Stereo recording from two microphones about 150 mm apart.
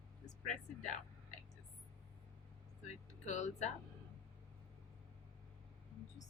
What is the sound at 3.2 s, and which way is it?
Speech, 50° left (ahead or behind).